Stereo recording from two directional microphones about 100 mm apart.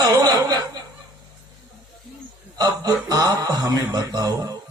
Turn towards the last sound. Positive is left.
turn(degrees=-35)  # may be behind; listen again after turning